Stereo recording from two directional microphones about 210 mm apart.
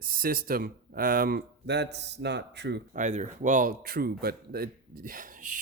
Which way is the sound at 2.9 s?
35° right (ahead or behind).